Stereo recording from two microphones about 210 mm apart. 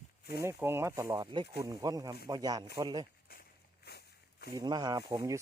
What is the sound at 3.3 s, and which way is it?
Walk, 50° left (ahead or behind).